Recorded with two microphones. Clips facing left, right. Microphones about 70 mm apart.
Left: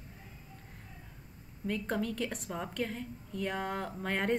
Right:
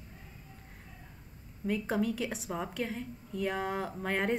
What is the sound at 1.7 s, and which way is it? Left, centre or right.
A woman's voice, centre.